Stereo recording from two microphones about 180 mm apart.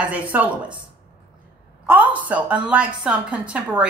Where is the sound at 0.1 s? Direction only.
10° right (ahead or behind).